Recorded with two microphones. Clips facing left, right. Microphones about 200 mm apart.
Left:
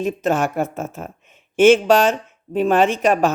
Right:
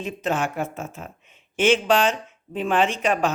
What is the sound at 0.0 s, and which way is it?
Speech, 45° left (ahead or behind).